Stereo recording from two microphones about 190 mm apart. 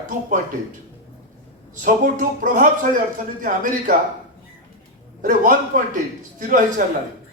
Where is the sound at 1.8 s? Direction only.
45° right (ahead or behind).